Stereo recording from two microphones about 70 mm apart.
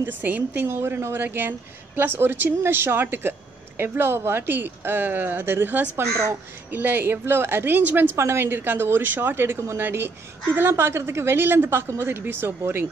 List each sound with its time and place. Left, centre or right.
0.0 s a woman's voice: right
0.7 s speech: right